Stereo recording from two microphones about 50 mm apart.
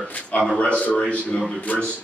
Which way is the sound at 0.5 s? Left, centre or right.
Left.